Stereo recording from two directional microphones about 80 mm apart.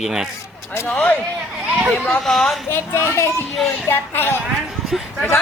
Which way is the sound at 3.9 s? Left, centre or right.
Left.